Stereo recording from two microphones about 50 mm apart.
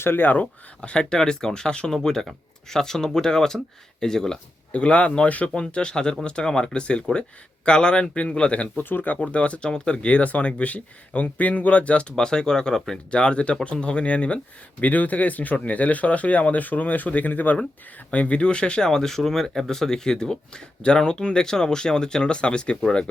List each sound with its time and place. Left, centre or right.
0.0 s speech: left
0.8 s speech: centre
4.7 s speech: left
8.8 s speech: left
9.2 s speech: left
18.1 s speech: left
18.9 s speech: centre